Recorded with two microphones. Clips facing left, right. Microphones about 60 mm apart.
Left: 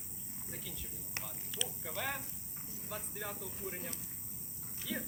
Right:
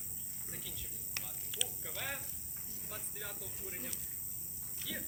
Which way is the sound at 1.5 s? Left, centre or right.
Centre.